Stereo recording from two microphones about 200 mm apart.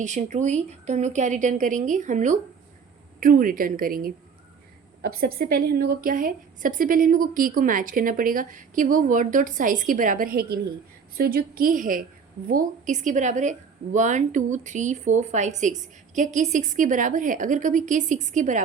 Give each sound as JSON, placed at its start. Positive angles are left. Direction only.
{"t": 0.0, "sound": "a woman's voice", "side_deg": -35}